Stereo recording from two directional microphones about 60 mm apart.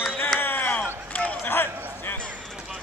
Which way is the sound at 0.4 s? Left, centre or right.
Left.